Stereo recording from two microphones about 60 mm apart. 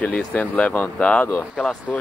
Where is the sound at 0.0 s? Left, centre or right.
Left.